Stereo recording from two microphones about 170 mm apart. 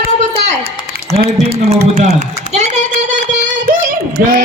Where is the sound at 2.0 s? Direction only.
40° right (ahead or behind).